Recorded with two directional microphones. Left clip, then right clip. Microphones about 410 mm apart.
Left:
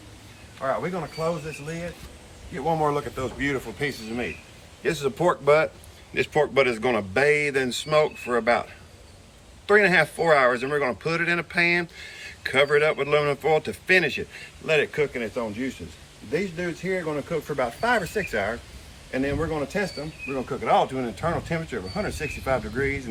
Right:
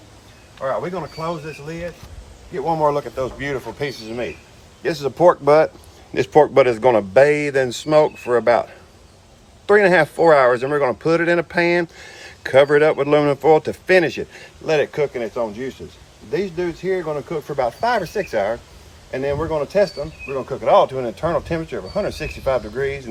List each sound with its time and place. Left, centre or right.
0.6 s speech: centre
2.6 s speech: centre
9.6 s speech: right
20.5 s speech: centre